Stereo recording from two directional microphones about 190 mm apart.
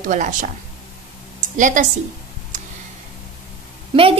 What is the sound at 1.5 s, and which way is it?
Speech, 40° right (ahead or behind).